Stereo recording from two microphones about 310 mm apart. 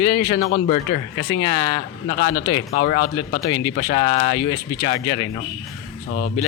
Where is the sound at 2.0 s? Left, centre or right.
Left.